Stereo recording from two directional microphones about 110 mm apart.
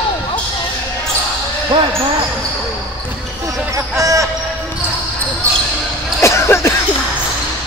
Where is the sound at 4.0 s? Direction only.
30° right (ahead or behind).